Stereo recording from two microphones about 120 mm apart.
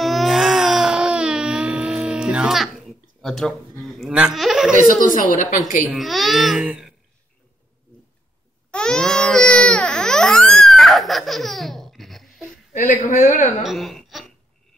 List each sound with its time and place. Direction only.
0.0 s baby cry: centre (ahead or behind)
3.2 s speech: 5° left (ahead or behind)
4.1 s speech: 10° right (ahead or behind)
4.8 s a woman's voice: 90° left
5.9 s speech: centre (ahead or behind)
8.7 s baby cry: 5° left (ahead or behind)
12.7 s a woman's voice: 90° left
13.7 s a sound: centre (ahead or behind)